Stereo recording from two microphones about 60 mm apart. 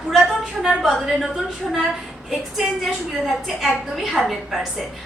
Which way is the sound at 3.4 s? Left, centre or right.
Centre.